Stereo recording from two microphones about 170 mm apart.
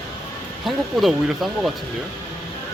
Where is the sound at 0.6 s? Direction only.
Centre (ahead or behind).